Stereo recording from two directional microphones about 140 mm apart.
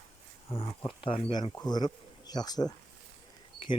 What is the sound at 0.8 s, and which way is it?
Speech, 40° left (ahead or behind).